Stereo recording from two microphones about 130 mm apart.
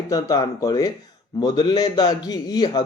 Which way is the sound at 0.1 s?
25° left (ahead or behind).